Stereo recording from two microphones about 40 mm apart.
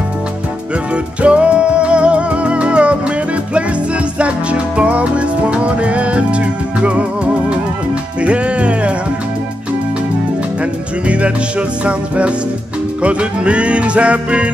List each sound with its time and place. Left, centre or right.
1.2 s music: right
4.2 s music: right
10.6 s music: right